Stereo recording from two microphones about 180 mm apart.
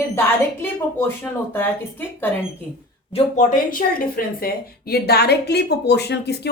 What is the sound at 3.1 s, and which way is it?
Speech, 45° left (ahead or behind).